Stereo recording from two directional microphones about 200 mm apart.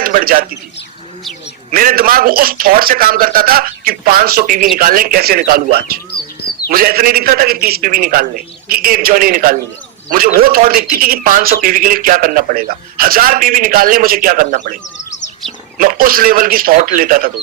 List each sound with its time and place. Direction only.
0.0 s speech: 45° right (ahead or behind)
1.7 s speech: 45° right (ahead or behind)
6.7 s speech: 50° right (ahead or behind)
15.8 s speech: 45° right (ahead or behind)